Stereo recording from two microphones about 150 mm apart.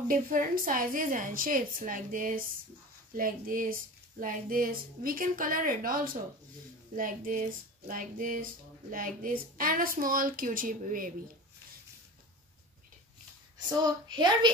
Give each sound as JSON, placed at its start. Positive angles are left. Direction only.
{"t": 0.1, "sound": "a woman's voice", "side_deg": -65}
{"t": 14.0, "sound": "speech", "side_deg": -30}